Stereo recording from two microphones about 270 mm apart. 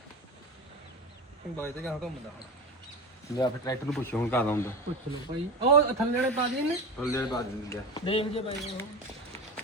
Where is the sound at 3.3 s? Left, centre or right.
Centre.